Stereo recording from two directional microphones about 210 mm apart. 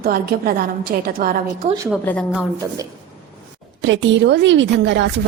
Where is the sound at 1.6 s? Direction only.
20° right (ahead or behind).